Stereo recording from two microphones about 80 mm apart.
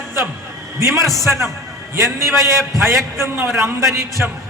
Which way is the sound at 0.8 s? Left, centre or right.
Right.